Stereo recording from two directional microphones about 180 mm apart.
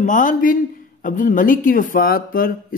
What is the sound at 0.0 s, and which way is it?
Speech, 45° left (ahead or behind).